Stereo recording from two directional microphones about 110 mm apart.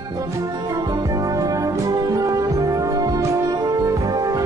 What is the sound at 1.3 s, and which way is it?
Music, 30° right (ahead or behind).